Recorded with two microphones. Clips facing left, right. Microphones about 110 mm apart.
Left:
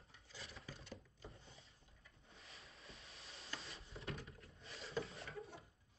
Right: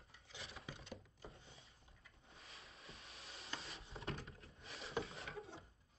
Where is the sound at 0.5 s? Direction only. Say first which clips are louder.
Right 3 dB; 80° right.